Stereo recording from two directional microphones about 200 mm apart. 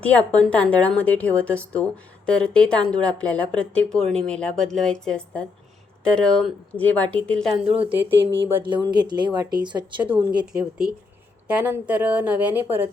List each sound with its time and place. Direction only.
0.0 s a woman's voice: 5° left (ahead or behind)
7.9 s a woman's voice: 10° right (ahead or behind)
8.6 s speech: 20° right (ahead or behind)
10.4 s a woman's voice: 5° right (ahead or behind)